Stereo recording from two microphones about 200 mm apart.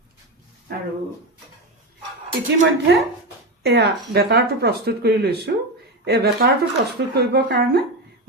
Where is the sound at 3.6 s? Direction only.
55° right (ahead or behind).